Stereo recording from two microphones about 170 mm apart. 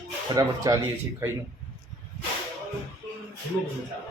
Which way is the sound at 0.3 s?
20° right (ahead or behind).